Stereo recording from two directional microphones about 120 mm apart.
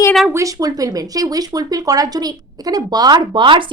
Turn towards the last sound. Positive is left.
turn(degrees=-40)  # may be behind; listen again after turning